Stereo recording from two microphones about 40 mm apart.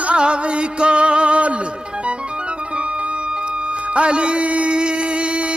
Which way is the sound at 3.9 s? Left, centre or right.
Right.